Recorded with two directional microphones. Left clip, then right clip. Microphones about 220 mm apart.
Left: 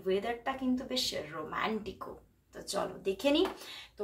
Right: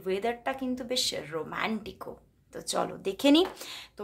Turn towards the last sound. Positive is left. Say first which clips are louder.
# right 4 dB
turn(degrees=-45)  # may be behind; listen again after turning